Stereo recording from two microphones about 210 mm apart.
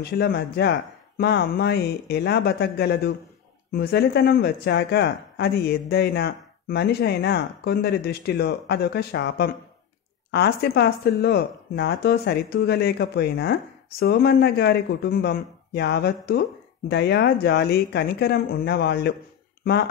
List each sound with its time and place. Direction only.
0.0 s speech: 50° left (ahead or behind)